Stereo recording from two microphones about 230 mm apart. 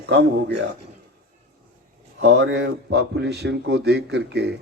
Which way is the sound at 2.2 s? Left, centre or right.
Right.